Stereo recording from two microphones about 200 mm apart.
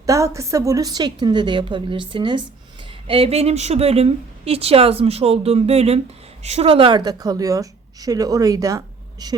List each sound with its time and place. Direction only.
0.0 s a woman's voice: 15° right (ahead or behind)